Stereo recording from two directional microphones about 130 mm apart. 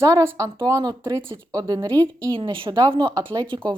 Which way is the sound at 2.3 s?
40° right (ahead or behind).